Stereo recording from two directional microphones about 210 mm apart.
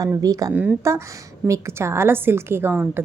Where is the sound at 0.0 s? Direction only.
15° right (ahead or behind).